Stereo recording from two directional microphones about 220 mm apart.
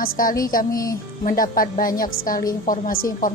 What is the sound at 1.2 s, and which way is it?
A woman's voice, 40° left (ahead or behind).